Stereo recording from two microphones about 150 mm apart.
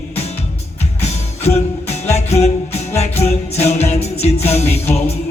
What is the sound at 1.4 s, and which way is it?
Music, 45° left (ahead or behind).